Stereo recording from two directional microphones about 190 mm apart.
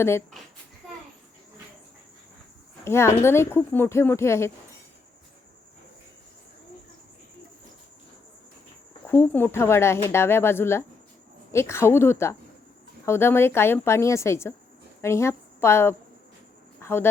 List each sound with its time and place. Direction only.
2.8 s speech: 15° left (ahead or behind)
9.0 s a woman's voice: 10° left (ahead or behind)